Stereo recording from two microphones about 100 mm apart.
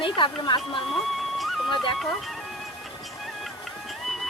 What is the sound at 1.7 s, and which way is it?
Speech, 55° left (ahead or behind).